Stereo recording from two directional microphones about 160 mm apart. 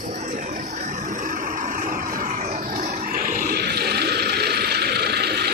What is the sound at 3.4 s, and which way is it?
Ratchet, 80° right.